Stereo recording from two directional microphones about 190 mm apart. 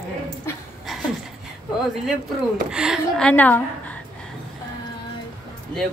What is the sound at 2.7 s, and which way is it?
Speech, 5° right (ahead or behind).